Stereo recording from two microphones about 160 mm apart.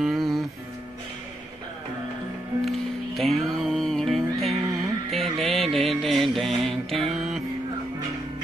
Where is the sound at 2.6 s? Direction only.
Centre (ahead or behind).